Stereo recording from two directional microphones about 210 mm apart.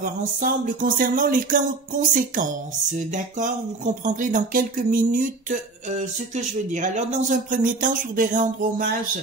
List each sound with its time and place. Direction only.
0.0 s speech: 40° right (ahead or behind)